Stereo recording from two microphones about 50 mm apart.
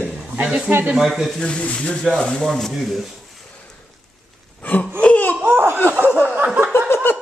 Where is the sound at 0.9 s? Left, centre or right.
Centre.